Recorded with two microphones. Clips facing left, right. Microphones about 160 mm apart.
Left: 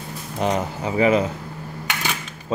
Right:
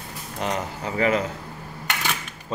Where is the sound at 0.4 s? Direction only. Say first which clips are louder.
Left 5 dB; 20° left (ahead or behind).